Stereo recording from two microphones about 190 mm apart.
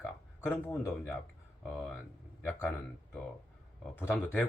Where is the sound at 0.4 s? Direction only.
10° left (ahead or behind).